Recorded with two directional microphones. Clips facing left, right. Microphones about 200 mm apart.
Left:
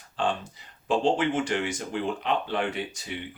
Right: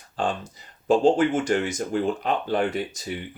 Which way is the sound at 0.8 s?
45° right (ahead or behind).